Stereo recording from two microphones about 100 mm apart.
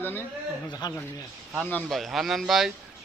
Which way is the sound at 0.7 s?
45° left (ahead or behind).